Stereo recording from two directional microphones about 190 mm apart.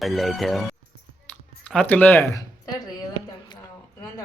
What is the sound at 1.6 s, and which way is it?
Speech, 5° left (ahead or behind).